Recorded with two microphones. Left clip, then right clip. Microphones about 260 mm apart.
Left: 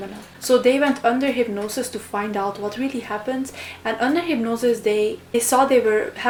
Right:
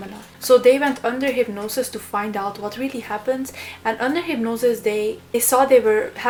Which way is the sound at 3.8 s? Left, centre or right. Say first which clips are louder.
Even; centre.